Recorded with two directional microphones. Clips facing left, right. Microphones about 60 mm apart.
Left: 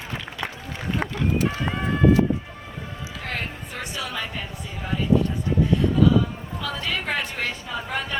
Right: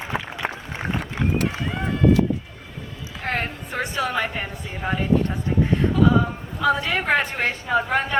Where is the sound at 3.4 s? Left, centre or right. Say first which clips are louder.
Right 5 dB; right.